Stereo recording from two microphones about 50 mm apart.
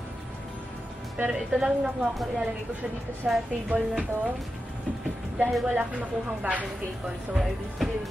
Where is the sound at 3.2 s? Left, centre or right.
Centre.